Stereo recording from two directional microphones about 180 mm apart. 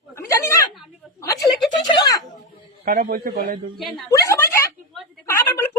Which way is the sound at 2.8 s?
55° right (ahead or behind).